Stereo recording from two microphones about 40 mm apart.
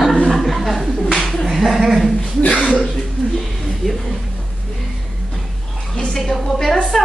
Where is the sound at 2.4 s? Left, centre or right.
Left.